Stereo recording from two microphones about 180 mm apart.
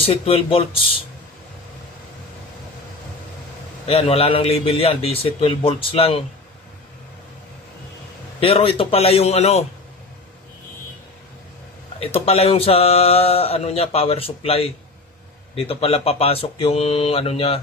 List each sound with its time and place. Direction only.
0.0 s speech: 35° left (ahead or behind)
3.8 s speech: 35° left (ahead or behind)
8.4 s speech: 30° left (ahead or behind)
12.0 s speech: 35° left (ahead or behind)